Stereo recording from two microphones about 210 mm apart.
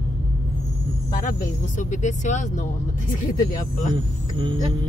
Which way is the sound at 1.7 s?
35° left (ahead or behind).